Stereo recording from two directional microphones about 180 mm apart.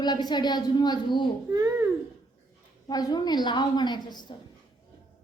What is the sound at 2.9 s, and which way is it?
A woman's voice, 20° left (ahead or behind).